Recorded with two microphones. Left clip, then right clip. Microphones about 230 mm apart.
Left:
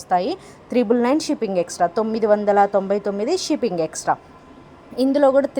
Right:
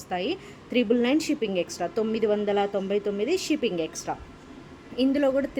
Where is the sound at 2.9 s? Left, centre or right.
Centre.